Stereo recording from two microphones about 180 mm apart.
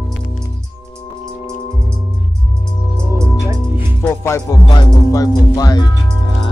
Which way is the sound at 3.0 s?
15° right (ahead or behind).